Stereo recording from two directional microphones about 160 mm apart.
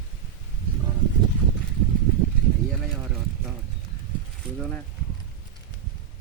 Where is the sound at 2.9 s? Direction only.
5° right (ahead or behind).